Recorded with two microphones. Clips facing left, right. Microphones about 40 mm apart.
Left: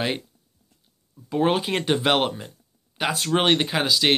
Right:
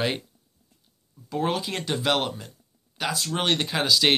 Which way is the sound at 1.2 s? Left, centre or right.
Left.